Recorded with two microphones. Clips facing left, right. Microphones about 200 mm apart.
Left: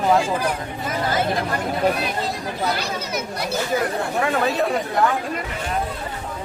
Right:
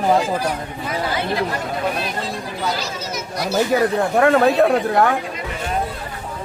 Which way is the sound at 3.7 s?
75° right (ahead or behind).